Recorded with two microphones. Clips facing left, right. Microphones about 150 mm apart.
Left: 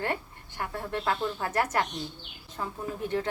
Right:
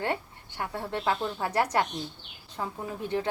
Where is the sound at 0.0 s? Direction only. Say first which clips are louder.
Right 1 dB; 20° right (ahead or behind).